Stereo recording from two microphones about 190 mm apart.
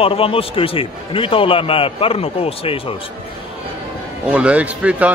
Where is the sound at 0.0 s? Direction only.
30° left (ahead or behind).